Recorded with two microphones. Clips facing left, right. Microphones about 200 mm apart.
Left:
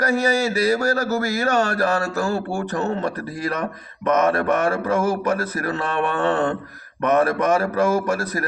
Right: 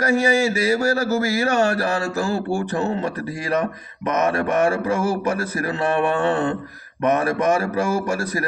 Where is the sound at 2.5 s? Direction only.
30° right (ahead or behind).